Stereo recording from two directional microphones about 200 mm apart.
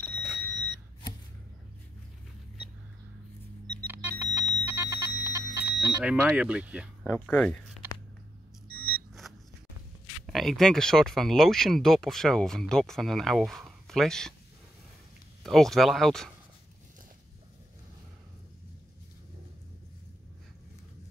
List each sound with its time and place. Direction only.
0.0 s alarm clock: 5° left (ahead or behind)
3.8 s alarm clock: 10° right (ahead or behind)
4.6 s alarm: 15° right (ahead or behind)
5.9 s speech: 5° right (ahead or behind)
7.2 s speech: 5° left (ahead or behind)
10.2 s speech: centre (ahead or behind)
15.4 s speech: centre (ahead or behind)